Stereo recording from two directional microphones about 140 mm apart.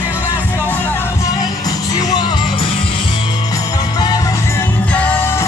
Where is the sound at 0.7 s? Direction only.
15° left (ahead or behind).